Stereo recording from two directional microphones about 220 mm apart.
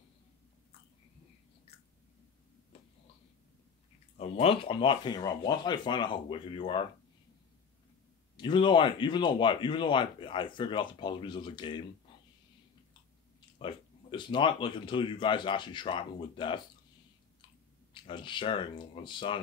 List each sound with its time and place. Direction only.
2.7 s a sound: 25° left (ahead or behind)
4.2 s speech: 25° left (ahead or behind)
8.4 s speech: 20° left (ahead or behind)
13.6 s speech: 20° left (ahead or behind)
17.9 s speech: 20° left (ahead or behind)